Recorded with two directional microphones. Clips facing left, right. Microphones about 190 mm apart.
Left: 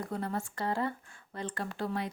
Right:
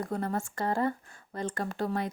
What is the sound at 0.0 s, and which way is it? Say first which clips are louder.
A woman's voice: right 3 dB; 45° right (ahead or behind).